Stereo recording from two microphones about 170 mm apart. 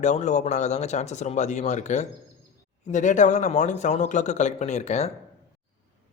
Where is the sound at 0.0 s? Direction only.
45° left (ahead or behind).